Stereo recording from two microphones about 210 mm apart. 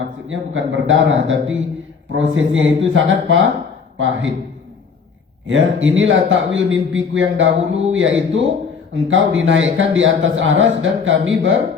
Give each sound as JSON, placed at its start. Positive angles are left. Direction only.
{"t": 0.0, "sound": "a man's voice", "side_deg": -65}
{"t": 5.5, "sound": "a man's voice", "side_deg": -65}